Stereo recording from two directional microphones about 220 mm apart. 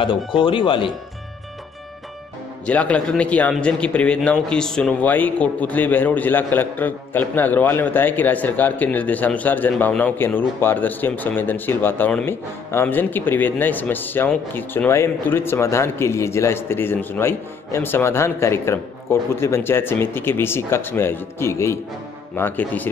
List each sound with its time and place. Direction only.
0.0 s speech: 25° left (ahead or behind)
2.6 s a man's voice: 5° left (ahead or behind)